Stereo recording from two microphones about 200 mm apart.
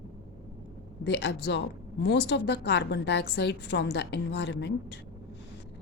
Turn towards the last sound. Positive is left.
turn(degrees=60)  # may be behind; listen again after turning